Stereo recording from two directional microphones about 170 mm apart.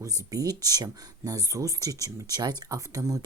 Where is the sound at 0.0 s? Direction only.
20° right (ahead or behind).